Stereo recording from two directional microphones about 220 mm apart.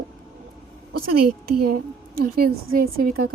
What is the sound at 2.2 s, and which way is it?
Speech, 40° right (ahead or behind).